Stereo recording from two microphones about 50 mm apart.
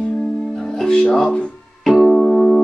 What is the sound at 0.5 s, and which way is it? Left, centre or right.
Music, centre.